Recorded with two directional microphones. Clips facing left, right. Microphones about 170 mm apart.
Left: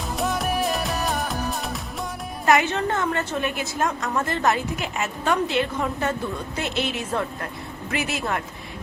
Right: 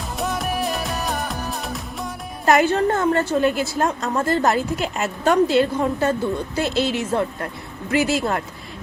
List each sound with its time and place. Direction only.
0.2 s music: centre (ahead or behind)
2.5 s a woman's voice: 35° right (ahead or behind)